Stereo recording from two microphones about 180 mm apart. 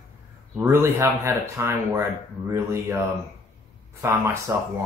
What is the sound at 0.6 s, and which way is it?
Speech, 15° right (ahead or behind).